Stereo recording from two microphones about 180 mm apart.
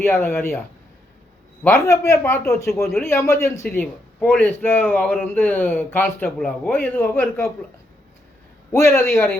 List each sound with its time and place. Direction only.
0.0 s a man's voice: 15° left (ahead or behind)
1.6 s a man's voice: 15° left (ahead or behind)
3.7 s a man's voice: 5° left (ahead or behind)
8.7 s a man's voice: 15° left (ahead or behind)